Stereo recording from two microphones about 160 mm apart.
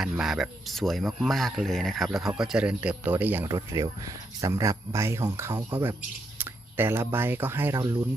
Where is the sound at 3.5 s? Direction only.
25° right (ahead or behind).